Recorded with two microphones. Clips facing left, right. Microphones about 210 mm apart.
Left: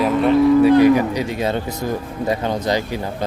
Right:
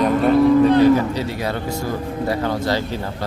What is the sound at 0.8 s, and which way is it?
Speech, 15° left (ahead or behind).